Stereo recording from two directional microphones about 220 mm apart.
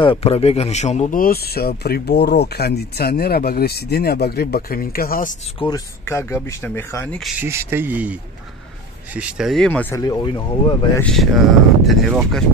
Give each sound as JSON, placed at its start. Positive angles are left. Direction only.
{"t": 0.0, "sound": "speech", "side_deg": 25}
{"t": 5.6, "sound": "speech", "side_deg": 15}
{"t": 7.3, "sound": "speech", "side_deg": -10}
{"t": 11.0, "sound": "speech", "side_deg": 0}